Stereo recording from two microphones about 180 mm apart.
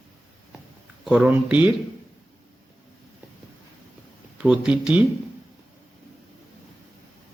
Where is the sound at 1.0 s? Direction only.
5° right (ahead or behind).